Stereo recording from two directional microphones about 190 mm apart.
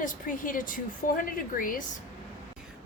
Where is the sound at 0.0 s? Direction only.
45° left (ahead or behind).